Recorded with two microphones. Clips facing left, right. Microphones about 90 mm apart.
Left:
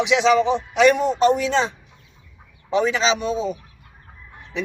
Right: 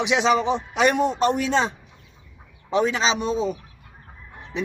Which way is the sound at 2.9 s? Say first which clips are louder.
Left 2 dB; 40° right (ahead or behind).